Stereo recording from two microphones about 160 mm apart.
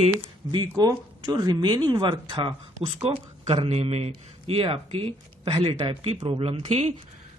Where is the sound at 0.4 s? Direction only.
30° right (ahead or behind).